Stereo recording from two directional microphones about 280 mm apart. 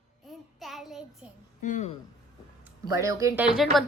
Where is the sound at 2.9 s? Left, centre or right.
Centre.